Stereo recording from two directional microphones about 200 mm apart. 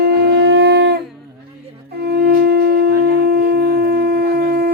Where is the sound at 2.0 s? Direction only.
55° right (ahead or behind).